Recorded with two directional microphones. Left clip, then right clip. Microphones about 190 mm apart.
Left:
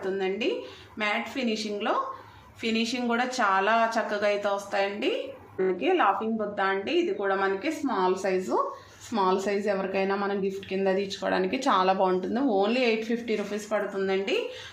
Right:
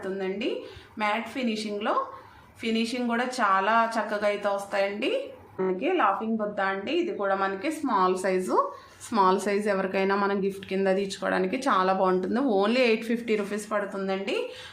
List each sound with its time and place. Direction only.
0.0 s speech: centre (ahead or behind)
6.7 s a woman's voice: 15° right (ahead or behind)